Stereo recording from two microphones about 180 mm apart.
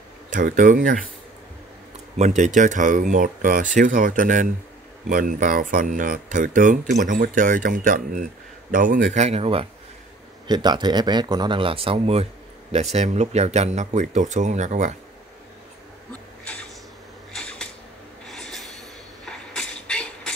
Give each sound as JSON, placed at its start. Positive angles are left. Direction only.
{"t": 0.3, "sound": "speech", "side_deg": -45}
{"t": 2.1, "sound": "speech", "side_deg": -40}
{"t": 17.3, "sound": "a sound", "side_deg": 5}